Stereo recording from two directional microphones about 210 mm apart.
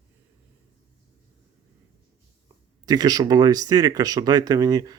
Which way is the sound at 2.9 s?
20° right (ahead or behind).